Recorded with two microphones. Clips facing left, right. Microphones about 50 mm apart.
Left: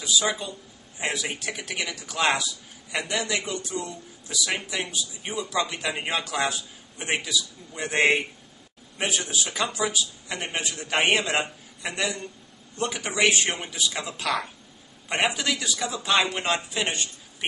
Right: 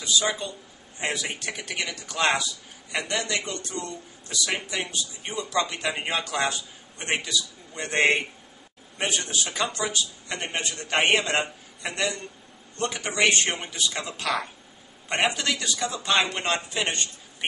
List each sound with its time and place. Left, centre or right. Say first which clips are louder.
0.0 s a man's voice: even; centre